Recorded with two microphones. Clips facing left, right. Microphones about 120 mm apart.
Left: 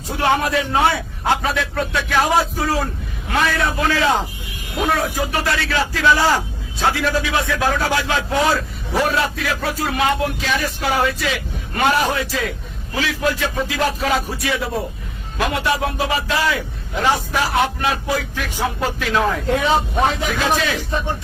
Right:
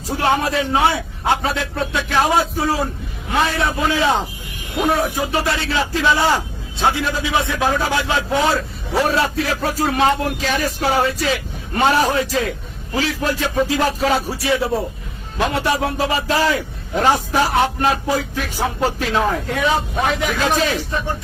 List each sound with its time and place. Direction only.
0.1 s a man's voice: 30° right (ahead or behind)
19.5 s speech: 25° left (ahead or behind)
20.6 s a man's voice: 40° right (ahead or behind)